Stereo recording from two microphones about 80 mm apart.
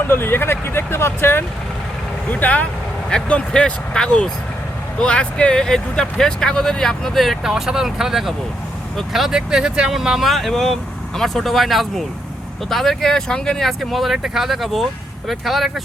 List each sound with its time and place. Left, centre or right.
0.1 s speech: left; by 15.8 s centre